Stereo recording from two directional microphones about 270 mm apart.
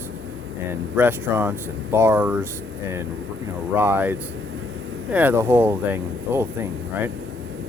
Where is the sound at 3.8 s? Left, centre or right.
Centre.